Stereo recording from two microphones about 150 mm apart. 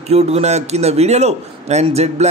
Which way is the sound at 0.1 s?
45° right (ahead or behind).